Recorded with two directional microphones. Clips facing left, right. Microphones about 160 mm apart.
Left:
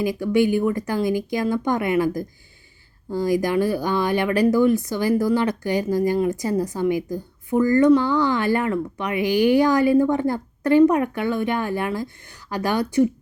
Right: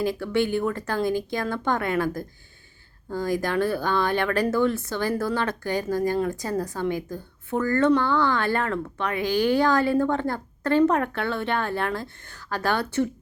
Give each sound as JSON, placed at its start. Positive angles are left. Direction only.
{"t": 0.0, "sound": "a woman's voice", "side_deg": 15}
{"t": 3.4, "sound": "a woman's voice", "side_deg": 15}